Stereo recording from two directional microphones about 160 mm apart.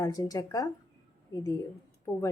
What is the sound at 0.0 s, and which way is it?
A woman's voice, 20° left (ahead or behind).